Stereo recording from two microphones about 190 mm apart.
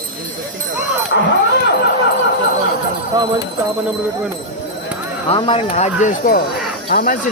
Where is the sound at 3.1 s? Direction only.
25° right (ahead or behind).